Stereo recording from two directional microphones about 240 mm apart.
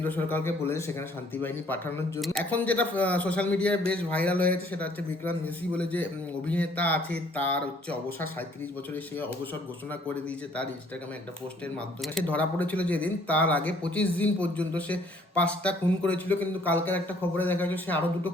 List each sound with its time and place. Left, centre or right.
0.0 s a man's voice: centre
12.0 s a man's voice: centre